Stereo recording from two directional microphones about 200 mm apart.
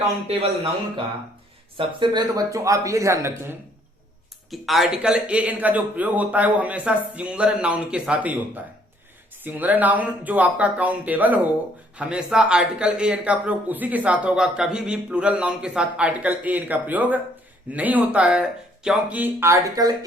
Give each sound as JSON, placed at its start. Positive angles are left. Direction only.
{"t": 0.3, "sound": "speech", "side_deg": -30}
{"t": 1.8, "sound": "speech", "side_deg": -25}
{"t": 4.5, "sound": "a man's voice", "side_deg": 0}
{"t": 9.4, "sound": "a man's voice", "side_deg": -10}